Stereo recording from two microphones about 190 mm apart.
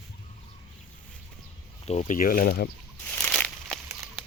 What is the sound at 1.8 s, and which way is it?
Speech, 35° left (ahead or behind).